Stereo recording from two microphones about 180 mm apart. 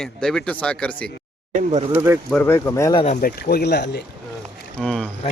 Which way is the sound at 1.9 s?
15° right (ahead or behind).